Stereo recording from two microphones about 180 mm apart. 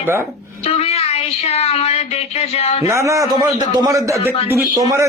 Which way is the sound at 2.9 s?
15° right (ahead or behind).